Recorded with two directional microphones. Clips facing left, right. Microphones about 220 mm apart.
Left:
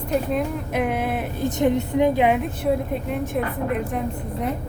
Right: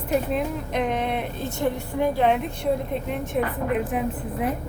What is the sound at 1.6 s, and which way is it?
Speech, 20° left (ahead or behind).